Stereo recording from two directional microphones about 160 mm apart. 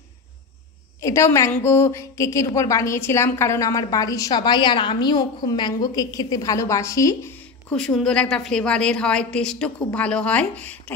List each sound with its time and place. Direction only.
1.0 s a woman's voice: 20° left (ahead or behind)
7.7 s a woman's voice: 5° left (ahead or behind)